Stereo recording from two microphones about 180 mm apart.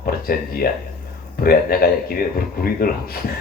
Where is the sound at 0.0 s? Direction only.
55° left (ahead or behind).